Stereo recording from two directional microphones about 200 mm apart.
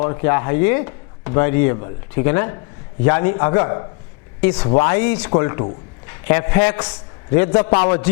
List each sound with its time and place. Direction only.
0.0 s speech: 15° left (ahead or behind)
4.4 s speech: 10° left (ahead or behind)
4.7 s speech: 20° left (ahead or behind)
4.9 s a man's voice: 10° left (ahead or behind)